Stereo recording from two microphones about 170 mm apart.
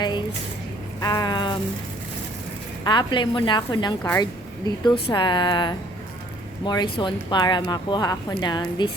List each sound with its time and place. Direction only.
1.0 s a sound: 25° left (ahead or behind)
2.8 s speech: 25° left (ahead or behind)
4.0 s speech: 15° left (ahead or behind)
5.0 s speech: 30° left (ahead or behind)